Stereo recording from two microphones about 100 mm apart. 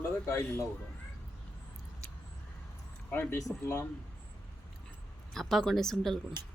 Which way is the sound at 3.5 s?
Centre (ahead or behind).